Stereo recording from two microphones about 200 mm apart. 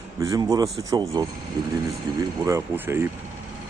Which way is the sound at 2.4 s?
15° right (ahead or behind).